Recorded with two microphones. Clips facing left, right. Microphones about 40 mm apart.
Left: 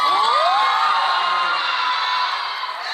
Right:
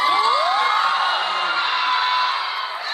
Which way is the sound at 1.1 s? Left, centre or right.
Centre.